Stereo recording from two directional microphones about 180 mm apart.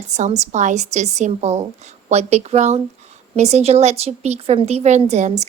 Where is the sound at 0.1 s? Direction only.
40° right (ahead or behind).